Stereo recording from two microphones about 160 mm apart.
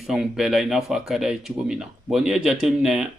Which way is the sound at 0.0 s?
Centre (ahead or behind).